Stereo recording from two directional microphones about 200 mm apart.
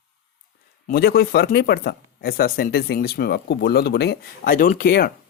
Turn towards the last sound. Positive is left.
turn(degrees=50)  # may be behind; listen again after turning